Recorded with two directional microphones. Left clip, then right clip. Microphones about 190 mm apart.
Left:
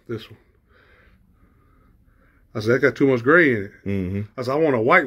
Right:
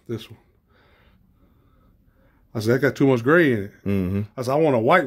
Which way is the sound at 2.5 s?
55° right (ahead or behind).